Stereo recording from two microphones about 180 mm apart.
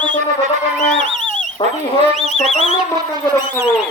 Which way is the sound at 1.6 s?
30° left (ahead or behind).